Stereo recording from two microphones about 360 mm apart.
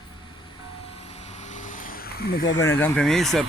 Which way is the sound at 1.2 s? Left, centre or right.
Centre.